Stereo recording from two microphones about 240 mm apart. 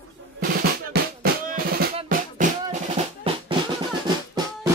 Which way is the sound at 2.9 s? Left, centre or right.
Right.